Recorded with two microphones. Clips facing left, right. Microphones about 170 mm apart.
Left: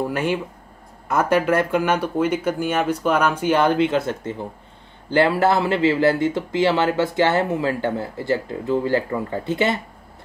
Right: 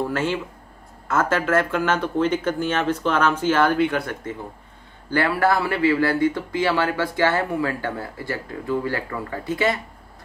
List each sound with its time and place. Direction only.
0.0 s speech: 15° left (ahead or behind)